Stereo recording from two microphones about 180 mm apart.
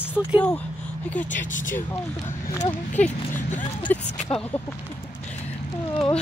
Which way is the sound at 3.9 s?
10° left (ahead or behind).